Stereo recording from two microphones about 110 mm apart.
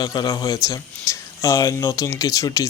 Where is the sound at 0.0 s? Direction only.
35° left (ahead or behind).